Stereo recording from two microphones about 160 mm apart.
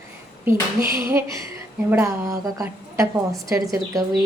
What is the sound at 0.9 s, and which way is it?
A woman's voice, 15° right (ahead or behind).